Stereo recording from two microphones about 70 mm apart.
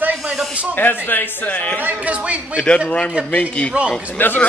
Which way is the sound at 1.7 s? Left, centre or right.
Right.